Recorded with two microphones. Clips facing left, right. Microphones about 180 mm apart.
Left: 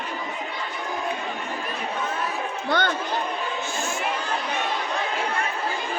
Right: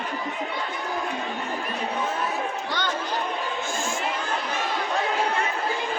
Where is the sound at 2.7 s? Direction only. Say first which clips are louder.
Left 9 dB; 55° left (ahead or behind).